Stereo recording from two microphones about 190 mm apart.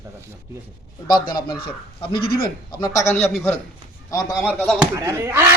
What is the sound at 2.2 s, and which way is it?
Speech, 50° left (ahead or behind).